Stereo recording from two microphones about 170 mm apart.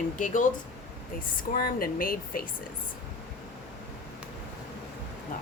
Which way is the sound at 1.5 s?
55° left (ahead or behind).